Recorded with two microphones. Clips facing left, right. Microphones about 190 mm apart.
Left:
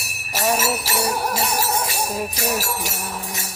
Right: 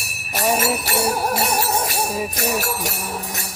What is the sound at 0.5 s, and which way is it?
Jingle bell, 55° right (ahead or behind).